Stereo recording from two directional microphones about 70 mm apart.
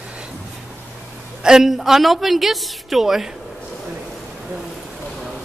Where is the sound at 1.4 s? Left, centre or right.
Centre.